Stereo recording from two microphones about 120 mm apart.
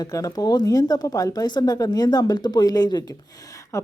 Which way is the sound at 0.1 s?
30° left (ahead or behind).